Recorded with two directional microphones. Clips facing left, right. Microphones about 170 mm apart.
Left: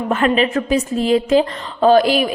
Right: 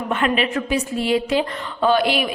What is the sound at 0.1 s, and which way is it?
A woman's voice, 35° left (ahead or behind).